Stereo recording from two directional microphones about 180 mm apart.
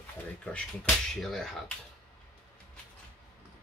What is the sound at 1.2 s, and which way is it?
Speech, centre (ahead or behind).